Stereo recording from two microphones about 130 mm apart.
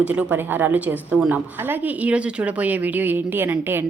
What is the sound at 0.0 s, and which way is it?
A woman's voice, 10° right (ahead or behind).